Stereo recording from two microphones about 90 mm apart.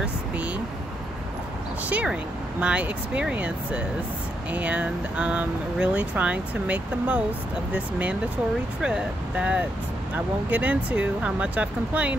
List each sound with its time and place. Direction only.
1.9 s speech: 15° right (ahead or behind)